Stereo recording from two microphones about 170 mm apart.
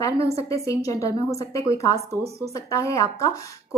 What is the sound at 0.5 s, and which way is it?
A woman's voice, 20° left (ahead or behind).